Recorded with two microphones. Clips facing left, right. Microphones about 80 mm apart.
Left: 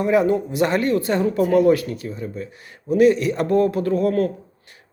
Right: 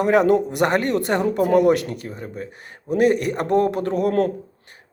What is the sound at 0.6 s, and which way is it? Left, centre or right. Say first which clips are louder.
Speech: even; right.